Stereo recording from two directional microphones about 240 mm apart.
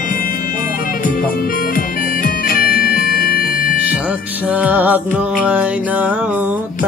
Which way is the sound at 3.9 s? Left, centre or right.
Centre.